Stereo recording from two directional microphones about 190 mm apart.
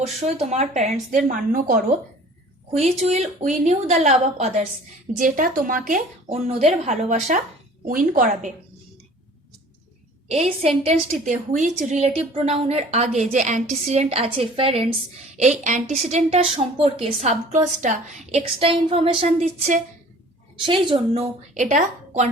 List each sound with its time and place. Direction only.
0.2 s a woman's voice: 35° right (ahead or behind)
3.0 s a woman's voice: 35° right (ahead or behind)
10.2 s a woman's voice: 30° right (ahead or behind)
15.4 s a woman's voice: 40° right (ahead or behind)
18.6 s a woman's voice: 30° right (ahead or behind)
20.7 s a woman's voice: 25° right (ahead or behind)